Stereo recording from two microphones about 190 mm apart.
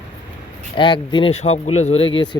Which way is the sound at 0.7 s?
25° left (ahead or behind).